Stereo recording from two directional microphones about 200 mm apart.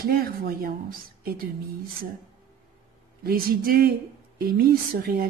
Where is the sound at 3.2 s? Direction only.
50° right (ahead or behind).